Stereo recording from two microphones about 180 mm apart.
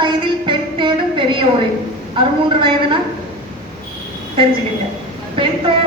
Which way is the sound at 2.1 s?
25° right (ahead or behind).